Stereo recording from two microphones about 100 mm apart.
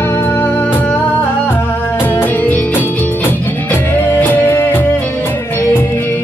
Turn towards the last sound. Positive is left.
turn(degrees=20)  # may be behind; listen again after turning